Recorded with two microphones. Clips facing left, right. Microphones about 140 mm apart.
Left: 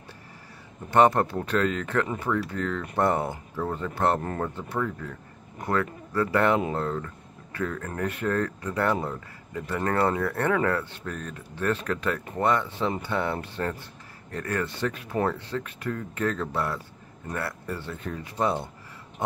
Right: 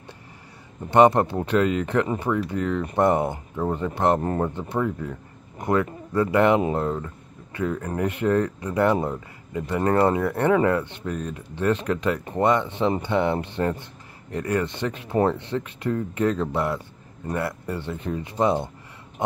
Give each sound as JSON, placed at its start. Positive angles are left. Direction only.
{"t": 0.8, "sound": "speech", "side_deg": -20}